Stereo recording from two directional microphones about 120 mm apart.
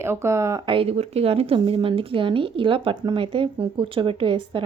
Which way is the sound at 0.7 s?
55° right (ahead or behind).